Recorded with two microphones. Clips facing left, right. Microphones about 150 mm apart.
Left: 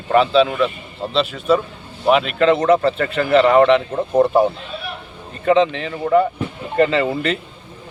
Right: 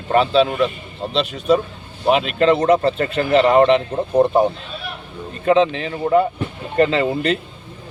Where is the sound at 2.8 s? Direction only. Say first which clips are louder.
Even; 30° right (ahead or behind).